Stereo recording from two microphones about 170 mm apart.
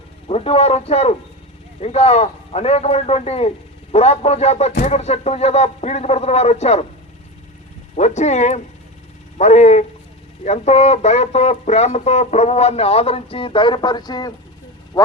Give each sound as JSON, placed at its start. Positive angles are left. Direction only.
{"t": 0.3, "sound": "speech", "side_deg": 35}
{"t": 7.9, "sound": "speech", "side_deg": 40}